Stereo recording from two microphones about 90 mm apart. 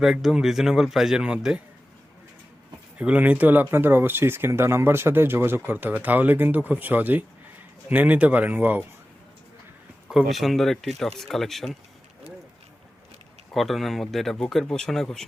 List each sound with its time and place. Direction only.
0.0 s speech: 5° right (ahead or behind)
3.0 s a man's voice: 15° right (ahead or behind)
10.1 s speech: 5° right (ahead or behind)
13.5 s speech: centre (ahead or behind)